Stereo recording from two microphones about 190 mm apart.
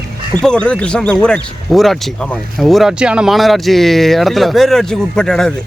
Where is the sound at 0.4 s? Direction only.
5° left (ahead or behind).